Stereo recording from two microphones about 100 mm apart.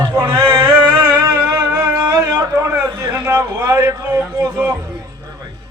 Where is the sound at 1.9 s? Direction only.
35° right (ahead or behind).